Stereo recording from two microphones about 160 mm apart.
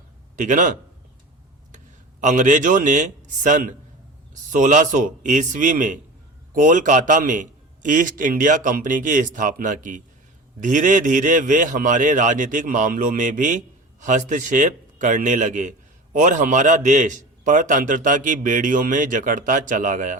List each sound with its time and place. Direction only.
0.3 s a man's voice: 55° right (ahead or behind)
2.2 s a man's voice: 55° right (ahead or behind)